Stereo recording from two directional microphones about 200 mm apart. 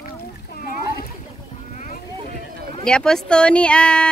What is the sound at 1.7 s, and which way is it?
Boat, 40° left (ahead or behind).